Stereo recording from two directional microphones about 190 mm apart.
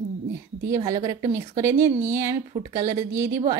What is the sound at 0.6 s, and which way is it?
Speech, 15° right (ahead or behind).